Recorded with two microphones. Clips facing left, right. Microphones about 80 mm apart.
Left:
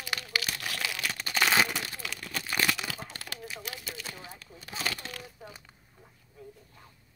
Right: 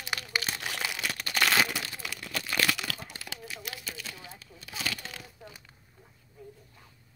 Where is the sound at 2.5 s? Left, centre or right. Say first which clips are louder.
Even; centre.